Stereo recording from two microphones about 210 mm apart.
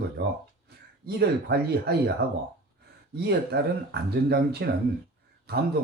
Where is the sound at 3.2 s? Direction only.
50° right (ahead or behind).